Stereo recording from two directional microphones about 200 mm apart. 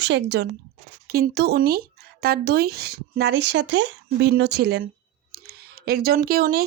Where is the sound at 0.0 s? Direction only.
60° right (ahead or behind).